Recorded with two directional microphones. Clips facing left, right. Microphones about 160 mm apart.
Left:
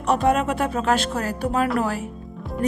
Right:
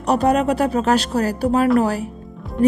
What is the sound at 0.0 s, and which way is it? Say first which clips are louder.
Speech: right 3 dB; 40° right (ahead or behind).